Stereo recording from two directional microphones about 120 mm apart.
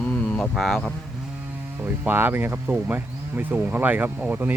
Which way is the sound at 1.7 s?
15° right (ahead or behind).